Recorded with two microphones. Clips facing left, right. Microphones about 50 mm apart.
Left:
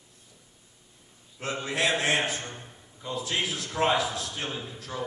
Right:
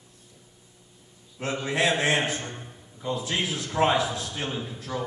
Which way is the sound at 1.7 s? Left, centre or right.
Centre.